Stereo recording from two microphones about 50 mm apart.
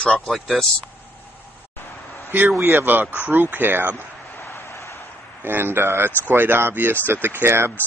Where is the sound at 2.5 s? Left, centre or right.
Right.